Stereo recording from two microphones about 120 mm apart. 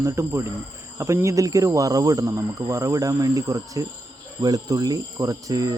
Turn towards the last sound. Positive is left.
turn(degrees=-30)  # may be behind; listen again after turning